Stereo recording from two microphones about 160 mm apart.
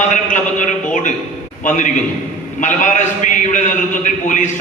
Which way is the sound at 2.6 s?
50° left (ahead or behind).